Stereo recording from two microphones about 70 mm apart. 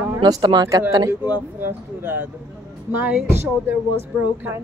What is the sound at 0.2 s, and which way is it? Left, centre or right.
Speech, right.